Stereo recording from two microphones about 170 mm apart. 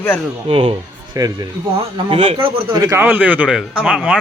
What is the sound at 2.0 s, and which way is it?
Speech, 35° right (ahead or behind).